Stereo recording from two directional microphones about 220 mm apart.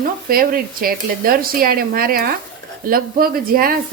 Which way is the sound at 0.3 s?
40° right (ahead or behind).